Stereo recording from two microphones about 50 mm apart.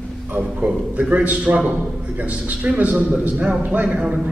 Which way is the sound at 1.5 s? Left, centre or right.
Right.